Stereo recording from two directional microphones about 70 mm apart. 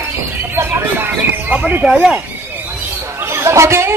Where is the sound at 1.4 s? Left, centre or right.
Centre.